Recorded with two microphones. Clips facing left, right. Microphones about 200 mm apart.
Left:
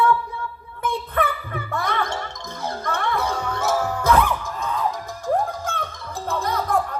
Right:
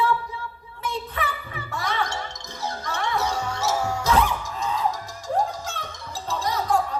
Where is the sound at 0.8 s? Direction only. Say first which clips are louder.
Left 6 dB; 55° left (ahead or behind).